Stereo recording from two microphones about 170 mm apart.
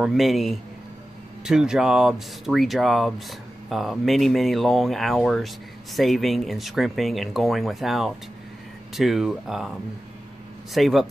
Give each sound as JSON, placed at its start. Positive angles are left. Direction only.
{"t": 0.0, "sound": "speech", "side_deg": 0}